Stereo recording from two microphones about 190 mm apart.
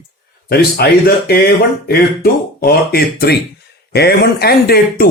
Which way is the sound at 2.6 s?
55° left (ahead or behind).